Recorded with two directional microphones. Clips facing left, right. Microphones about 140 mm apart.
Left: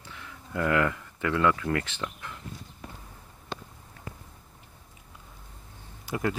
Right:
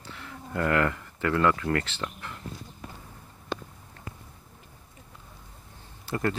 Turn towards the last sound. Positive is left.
turn(degrees=10)  # may be behind; listen again after turning